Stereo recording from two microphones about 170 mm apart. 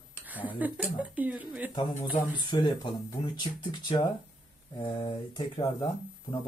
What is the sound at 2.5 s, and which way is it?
Speech, 25° left (ahead or behind).